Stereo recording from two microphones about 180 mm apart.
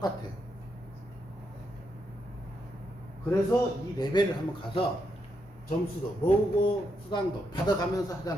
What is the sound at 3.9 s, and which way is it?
Speech, 25° left (ahead or behind).